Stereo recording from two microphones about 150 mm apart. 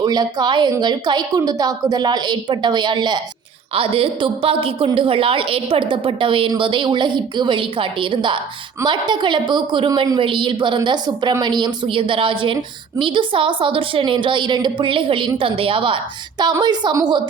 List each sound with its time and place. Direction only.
0.0 s a woman's voice: 25° right (ahead or behind)